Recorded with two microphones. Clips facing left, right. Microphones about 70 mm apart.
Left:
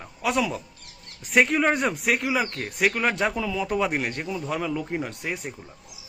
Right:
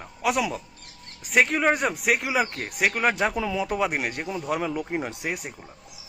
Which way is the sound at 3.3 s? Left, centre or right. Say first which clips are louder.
Right 1 dB; right.